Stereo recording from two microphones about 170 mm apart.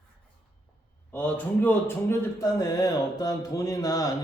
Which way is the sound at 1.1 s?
10° left (ahead or behind).